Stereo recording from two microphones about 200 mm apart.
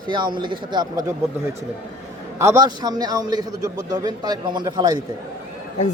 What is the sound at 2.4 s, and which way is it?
A man's voice, 15° right (ahead or behind).